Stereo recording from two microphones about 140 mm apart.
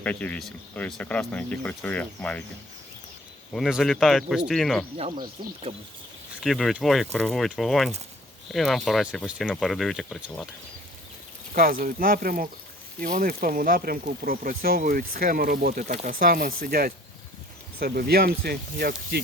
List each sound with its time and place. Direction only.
0.0 s speech: 10° left (ahead or behind)
3.5 s speech: centre (ahead or behind)
5.4 s speech: 40° right (ahead or behind)
6.4 s speech: centre (ahead or behind)
11.5 s speech: 90° right
13.0 s speech: 75° right (ahead or behind)